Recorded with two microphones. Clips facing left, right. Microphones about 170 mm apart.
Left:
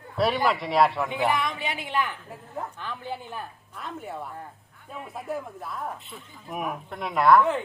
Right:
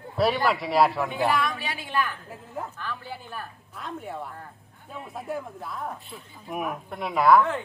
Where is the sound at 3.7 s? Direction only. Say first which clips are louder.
Right 1 dB; centre (ahead or behind).